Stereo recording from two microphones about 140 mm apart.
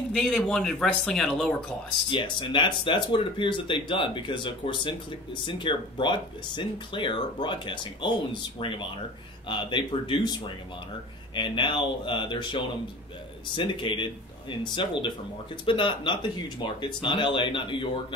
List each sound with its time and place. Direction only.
0.1 s speech: 5° left (ahead or behind)
2.0 s speech: 35° left (ahead or behind)